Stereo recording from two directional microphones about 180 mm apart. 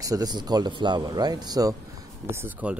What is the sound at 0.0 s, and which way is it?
Speech, 20° right (ahead or behind).